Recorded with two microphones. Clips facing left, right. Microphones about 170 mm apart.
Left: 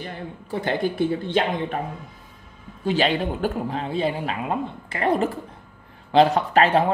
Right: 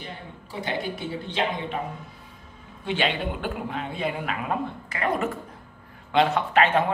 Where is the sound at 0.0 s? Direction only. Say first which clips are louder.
Left 5 dB; 50° left (ahead or behind).